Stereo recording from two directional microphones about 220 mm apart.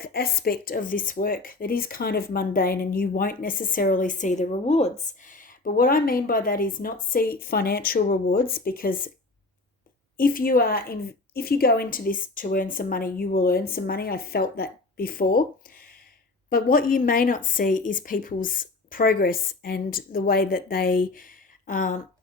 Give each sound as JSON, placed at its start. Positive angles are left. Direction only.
{"t": 0.0, "sound": "speech", "side_deg": 45}
{"t": 10.2, "sound": "speech", "side_deg": 40}